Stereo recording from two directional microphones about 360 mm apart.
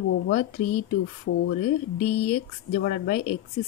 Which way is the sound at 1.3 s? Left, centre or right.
Left.